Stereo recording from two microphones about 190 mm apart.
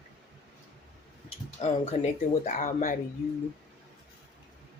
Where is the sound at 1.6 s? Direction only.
35° left (ahead or behind).